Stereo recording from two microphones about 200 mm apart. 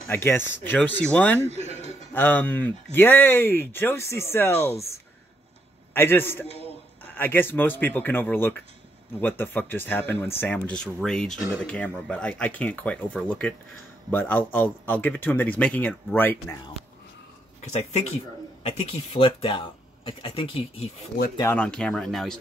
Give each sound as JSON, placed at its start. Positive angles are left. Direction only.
{"t": 0.1, "sound": "speech", "side_deg": 10}
{"t": 1.7, "sound": "a sound", "side_deg": -30}
{"t": 2.1, "sound": "speech", "side_deg": 10}
{"t": 17.6, "sound": "speech", "side_deg": 35}
{"t": 21.4, "sound": "speech", "side_deg": 10}